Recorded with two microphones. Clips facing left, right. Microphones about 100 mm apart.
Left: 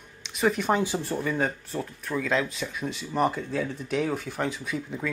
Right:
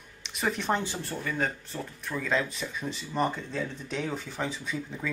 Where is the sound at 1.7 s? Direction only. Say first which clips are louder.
Left 5 dB; centre (ahead or behind).